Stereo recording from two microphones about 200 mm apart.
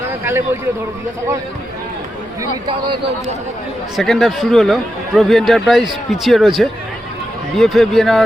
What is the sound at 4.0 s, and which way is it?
Speech, centre (ahead or behind).